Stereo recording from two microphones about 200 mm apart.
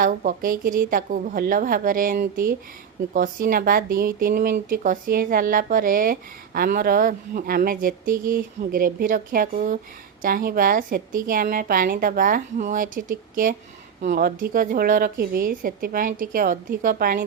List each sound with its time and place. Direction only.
0.0 s speech: 45° right (ahead or behind)